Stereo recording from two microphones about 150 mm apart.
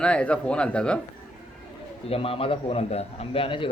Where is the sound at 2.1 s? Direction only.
40° left (ahead or behind).